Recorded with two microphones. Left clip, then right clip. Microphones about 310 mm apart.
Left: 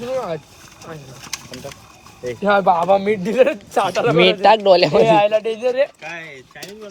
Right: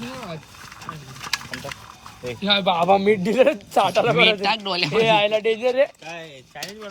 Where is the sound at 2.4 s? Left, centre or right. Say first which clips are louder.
Left 5 dB; centre.